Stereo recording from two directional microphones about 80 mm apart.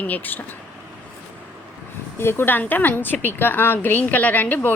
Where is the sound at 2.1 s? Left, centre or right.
Left.